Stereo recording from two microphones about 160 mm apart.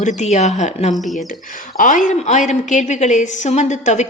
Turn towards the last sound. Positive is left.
turn(degrees=45)  # may be behind; listen again after turning